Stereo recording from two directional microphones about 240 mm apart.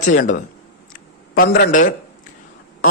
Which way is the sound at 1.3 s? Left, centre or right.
Left.